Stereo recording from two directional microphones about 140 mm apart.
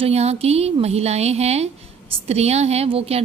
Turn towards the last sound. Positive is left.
turn(degrees=-45)  # may be behind; listen again after turning